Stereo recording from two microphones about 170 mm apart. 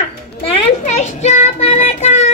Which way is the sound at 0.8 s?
40° left (ahead or behind).